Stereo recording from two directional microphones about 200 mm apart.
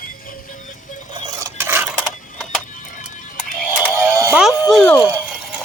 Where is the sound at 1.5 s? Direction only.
10° right (ahead or behind).